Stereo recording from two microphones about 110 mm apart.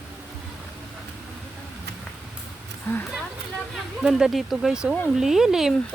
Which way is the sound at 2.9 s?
20° left (ahead or behind).